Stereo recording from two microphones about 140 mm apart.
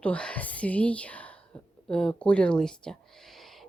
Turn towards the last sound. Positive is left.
turn(degrees=0)  # may be behind; listen again after turning